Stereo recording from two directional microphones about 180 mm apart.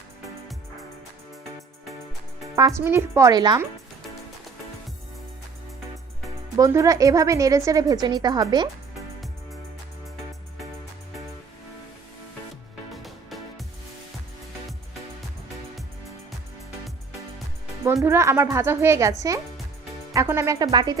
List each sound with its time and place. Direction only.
2.6 s a woman's voice: 15° right (ahead or behind)
6.6 s a woman's voice: 15° right (ahead or behind)
12.9 s music: centre (ahead or behind)
18.0 s a woman's voice: 15° right (ahead or behind)
20.1 s a woman's voice: 15° right (ahead or behind)